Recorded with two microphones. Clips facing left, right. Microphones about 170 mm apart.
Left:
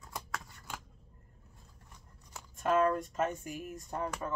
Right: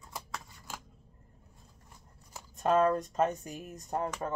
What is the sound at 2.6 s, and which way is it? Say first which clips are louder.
Speech: right 2 dB; 35° right (ahead or behind).